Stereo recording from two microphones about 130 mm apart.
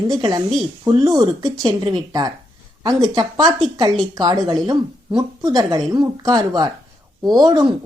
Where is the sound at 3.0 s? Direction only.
30° right (ahead or behind).